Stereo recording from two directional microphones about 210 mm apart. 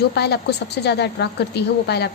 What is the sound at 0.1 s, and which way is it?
A woman's voice, 50° left (ahead or behind).